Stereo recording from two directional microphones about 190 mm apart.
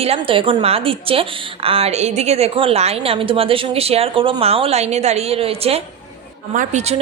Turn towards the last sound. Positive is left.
turn(degrees=-35)  # may be behind; listen again after turning